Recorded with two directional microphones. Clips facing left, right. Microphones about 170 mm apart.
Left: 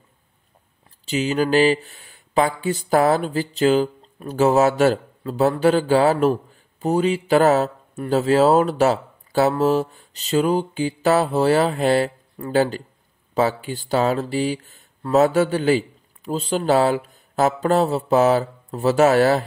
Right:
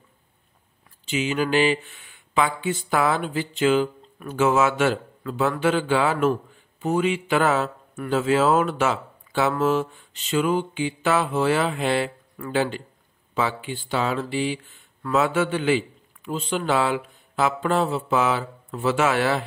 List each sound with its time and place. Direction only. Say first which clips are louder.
1.0 s speech: left 3 dB; 35° left (ahead or behind)